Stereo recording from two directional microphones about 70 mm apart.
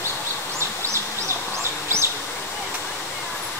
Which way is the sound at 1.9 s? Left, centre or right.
Right.